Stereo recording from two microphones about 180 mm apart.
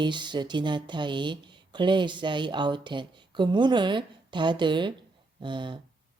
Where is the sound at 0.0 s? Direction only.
25° right (ahead or behind).